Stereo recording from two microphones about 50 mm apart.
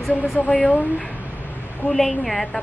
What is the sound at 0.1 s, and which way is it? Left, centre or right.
Speech, left.